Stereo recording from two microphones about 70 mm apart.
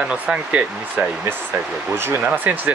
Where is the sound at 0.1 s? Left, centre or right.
Centre.